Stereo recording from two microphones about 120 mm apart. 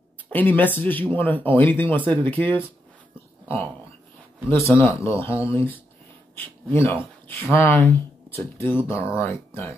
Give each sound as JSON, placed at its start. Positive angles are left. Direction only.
{"t": 0.3, "sound": "speech", "side_deg": 15}
{"t": 4.5, "sound": "speech", "side_deg": 20}